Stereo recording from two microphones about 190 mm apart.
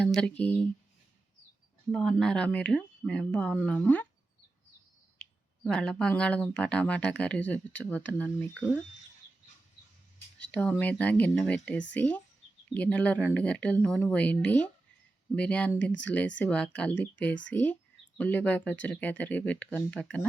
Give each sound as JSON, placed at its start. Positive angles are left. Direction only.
{"t": 0.0, "sound": "speech", "side_deg": 5}
{"t": 1.9, "sound": "speech", "side_deg": 0}
{"t": 5.2, "sound": "speech", "side_deg": 5}
{"t": 10.4, "sound": "speech", "side_deg": 5}
{"t": 15.8, "sound": "speech", "side_deg": 70}
{"t": 16.4, "sound": "speech", "side_deg": 5}